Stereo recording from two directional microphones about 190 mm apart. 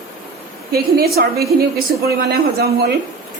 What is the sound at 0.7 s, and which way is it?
Speech, 55° right (ahead or behind).